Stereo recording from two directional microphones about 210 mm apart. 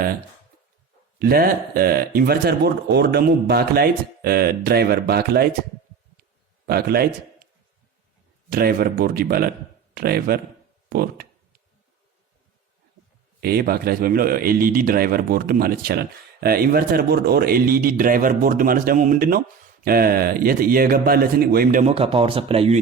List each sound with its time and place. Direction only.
1.2 s a man's voice: 45° right (ahead or behind)
6.7 s a man's voice: 50° right (ahead or behind)
8.4 s a man's voice: 45° right (ahead or behind)
13.4 s a man's voice: 45° right (ahead or behind); by 22.8 s 30° right (ahead or behind)